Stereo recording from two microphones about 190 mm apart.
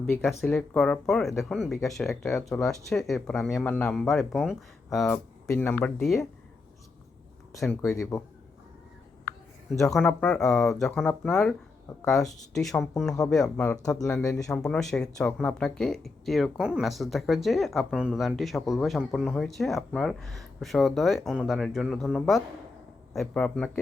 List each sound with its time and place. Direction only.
0.0 s speech: 5° left (ahead or behind)
8.1 s a man's voice: 15° left (ahead or behind)
9.9 s speech: centre (ahead or behind)